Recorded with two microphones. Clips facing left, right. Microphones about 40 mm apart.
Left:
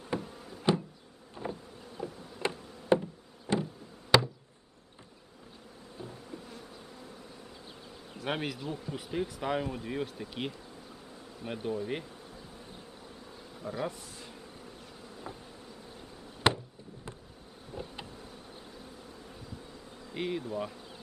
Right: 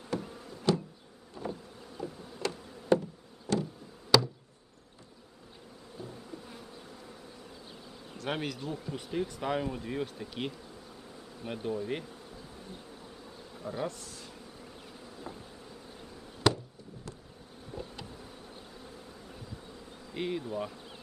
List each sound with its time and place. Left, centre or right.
0.2 s a sound: centre
0.7 s bee: left
2.0 s insect: centre
2.4 s insect: left
3.4 s a sound: left
4.1 s chop: left
6.0 s bee: left
8.1 s speech: centre
13.6 s bee: centre
13.8 s speech: centre
16.4 s a sound: left
17.7 s insect: centre
20.1 s speech: centre